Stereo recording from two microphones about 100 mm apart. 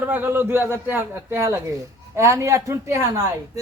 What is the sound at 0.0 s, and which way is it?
A man's voice, 20° right (ahead or behind).